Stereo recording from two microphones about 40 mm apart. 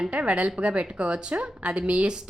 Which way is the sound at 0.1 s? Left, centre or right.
Right.